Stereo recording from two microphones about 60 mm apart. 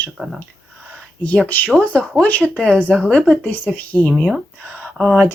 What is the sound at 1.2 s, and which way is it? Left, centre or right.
Speech, left.